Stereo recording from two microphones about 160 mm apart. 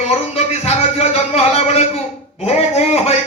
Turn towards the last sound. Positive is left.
turn(degrees=40)  # may be behind; listen again after turning